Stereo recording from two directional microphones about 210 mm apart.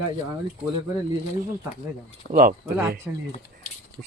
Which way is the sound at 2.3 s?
40° right (ahead or behind).